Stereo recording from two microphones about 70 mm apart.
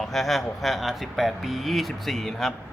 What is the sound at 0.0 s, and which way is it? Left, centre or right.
A man's voice, centre.